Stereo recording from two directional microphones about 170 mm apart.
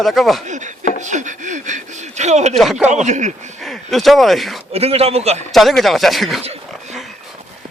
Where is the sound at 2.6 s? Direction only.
Centre (ahead or behind).